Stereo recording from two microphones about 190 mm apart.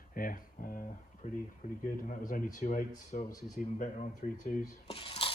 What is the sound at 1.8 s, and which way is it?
Speech, 45° left (ahead or behind).